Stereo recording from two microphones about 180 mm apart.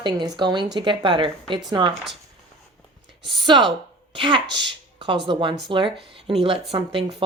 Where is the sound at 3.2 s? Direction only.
25° right (ahead or behind).